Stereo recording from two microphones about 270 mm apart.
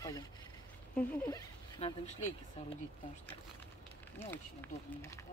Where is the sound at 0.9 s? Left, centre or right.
Centre.